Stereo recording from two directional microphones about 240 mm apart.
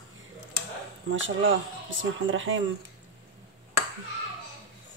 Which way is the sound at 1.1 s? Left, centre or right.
Right.